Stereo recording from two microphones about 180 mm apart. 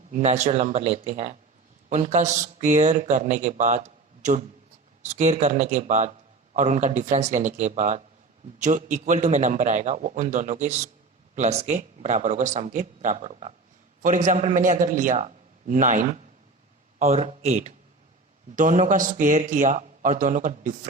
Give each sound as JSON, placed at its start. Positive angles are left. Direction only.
{"t": 0.1, "sound": "speech", "side_deg": -40}